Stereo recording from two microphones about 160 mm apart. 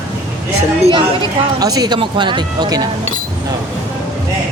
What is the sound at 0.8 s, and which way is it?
A woman's voice, 30° right (ahead or behind).